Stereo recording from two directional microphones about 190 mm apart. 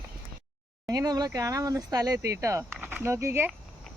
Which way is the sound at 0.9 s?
20° right (ahead or behind).